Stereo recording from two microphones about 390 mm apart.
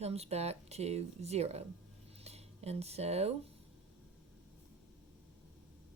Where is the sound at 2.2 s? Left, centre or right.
Centre.